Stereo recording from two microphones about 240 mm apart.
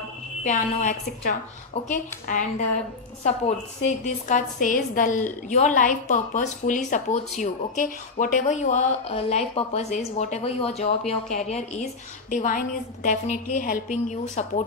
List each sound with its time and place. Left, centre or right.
0.4 s a woman's voice: left